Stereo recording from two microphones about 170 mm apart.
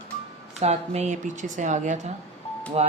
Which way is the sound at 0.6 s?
40° right (ahead or behind).